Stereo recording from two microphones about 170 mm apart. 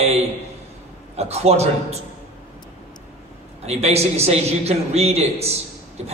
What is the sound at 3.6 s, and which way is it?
A man's voice, 40° right (ahead or behind).